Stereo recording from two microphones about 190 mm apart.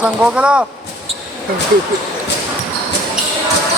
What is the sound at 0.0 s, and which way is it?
Speech, 5° right (ahead or behind).